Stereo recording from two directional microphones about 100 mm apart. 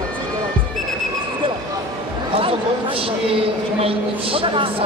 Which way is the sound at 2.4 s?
65° right (ahead or behind).